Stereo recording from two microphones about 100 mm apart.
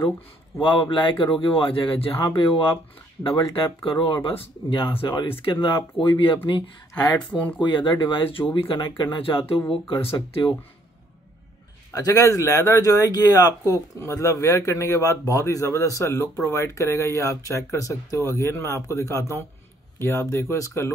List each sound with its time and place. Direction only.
0.6 s speech: 60° left (ahead or behind)
7.2 s speech: 10° left (ahead or behind)
7.6 s speech: 55° left (ahead or behind)
11.9 s speech: 35° left (ahead or behind)